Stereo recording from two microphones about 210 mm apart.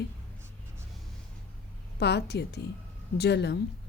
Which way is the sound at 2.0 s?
55° left (ahead or behind).